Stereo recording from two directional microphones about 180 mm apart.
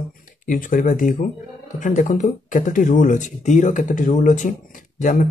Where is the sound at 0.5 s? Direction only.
50° left (ahead or behind).